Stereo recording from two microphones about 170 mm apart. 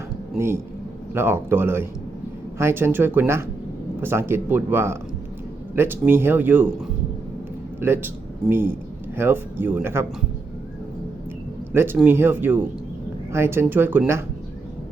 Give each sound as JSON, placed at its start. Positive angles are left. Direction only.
{"t": 0.3, "sound": "speech", "side_deg": -15}
{"t": 7.8, "sound": "speech", "side_deg": -10}
{"t": 11.7, "sound": "speech", "side_deg": -15}